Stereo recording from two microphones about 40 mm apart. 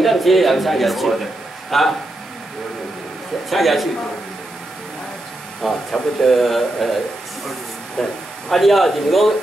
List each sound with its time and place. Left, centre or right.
0.0 s speech: centre
3.4 s speech: centre
5.6 s speech: centre
8.0 s speech: centre